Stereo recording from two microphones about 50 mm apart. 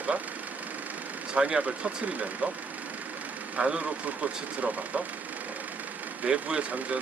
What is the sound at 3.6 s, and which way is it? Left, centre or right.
Speech, right.